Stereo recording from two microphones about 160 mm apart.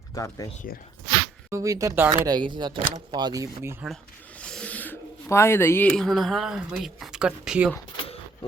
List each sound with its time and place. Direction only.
0.1 s speech: 20° left (ahead or behind)
1.5 s speech: 20° right (ahead or behind)
4.4 s speech: 5° left (ahead or behind)